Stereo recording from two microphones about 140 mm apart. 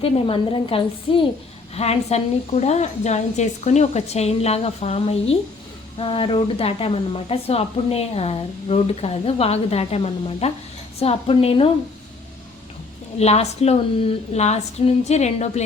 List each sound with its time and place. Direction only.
0.0 s a woman's voice: 40° left (ahead or behind)
1.7 s speech: 50° left (ahead or behind)
13.1 s speech: 50° left (ahead or behind)